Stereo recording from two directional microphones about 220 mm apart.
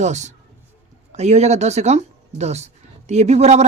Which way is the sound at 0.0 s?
30° right (ahead or behind).